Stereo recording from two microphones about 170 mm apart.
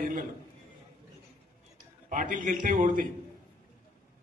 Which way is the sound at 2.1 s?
50° right (ahead or behind).